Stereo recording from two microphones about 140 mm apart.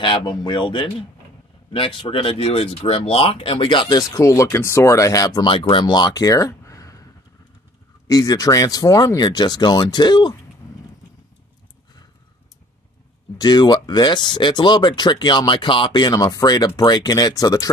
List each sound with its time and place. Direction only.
0.0 s speech: 35° left (ahead or behind)
4.1 s speech: 25° left (ahead or behind)
8.1 s speech: 25° left (ahead or behind)
13.4 s speech: 30° left (ahead or behind)